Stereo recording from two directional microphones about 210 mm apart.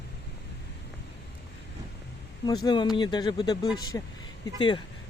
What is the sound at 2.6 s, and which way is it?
Speech, 20° left (ahead or behind).